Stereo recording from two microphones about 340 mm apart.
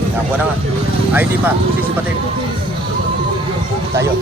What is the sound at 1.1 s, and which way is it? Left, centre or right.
Speech, centre.